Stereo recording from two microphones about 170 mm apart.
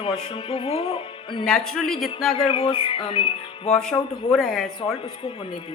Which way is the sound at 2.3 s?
30° left (ahead or behind).